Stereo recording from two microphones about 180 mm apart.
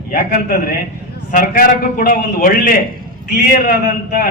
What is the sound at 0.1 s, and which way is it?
A man's voice, 55° left (ahead or behind).